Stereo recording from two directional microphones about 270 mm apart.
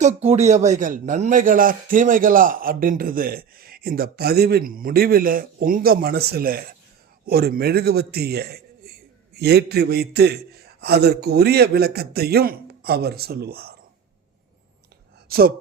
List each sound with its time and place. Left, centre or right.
0.0 s a man's voice: right
15.3 s speech: right